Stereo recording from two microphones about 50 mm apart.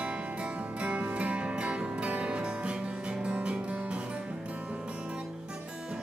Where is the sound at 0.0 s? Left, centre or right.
Right.